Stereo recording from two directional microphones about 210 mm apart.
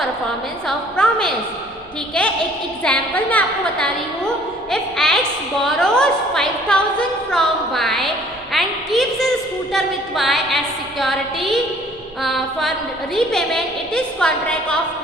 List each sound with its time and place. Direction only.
0.7 s a woman's voice: 5° left (ahead or behind)
2.8 s a woman's voice: 5° left (ahead or behind)